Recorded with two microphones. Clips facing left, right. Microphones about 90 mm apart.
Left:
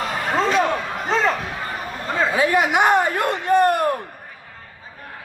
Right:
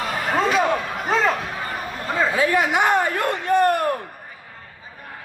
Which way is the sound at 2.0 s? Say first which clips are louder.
Even; centre (ahead or behind).